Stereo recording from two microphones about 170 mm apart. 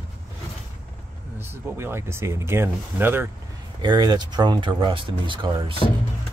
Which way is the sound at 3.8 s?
25° right (ahead or behind).